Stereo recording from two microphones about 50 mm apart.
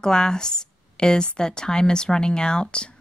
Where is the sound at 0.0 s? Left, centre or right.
Centre.